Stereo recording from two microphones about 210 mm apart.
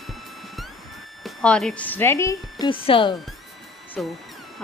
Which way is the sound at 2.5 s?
25° left (ahead or behind).